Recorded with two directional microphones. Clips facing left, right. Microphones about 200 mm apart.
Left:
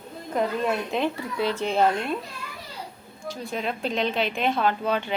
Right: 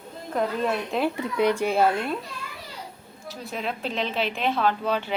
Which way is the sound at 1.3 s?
15° right (ahead or behind).